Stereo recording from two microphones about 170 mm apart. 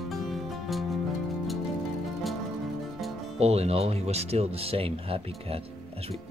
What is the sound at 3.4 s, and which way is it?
Speech, 35° right (ahead or behind).